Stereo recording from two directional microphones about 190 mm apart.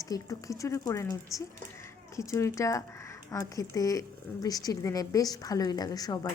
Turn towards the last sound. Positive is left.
turn(degrees=20)  # may be behind; listen again after turning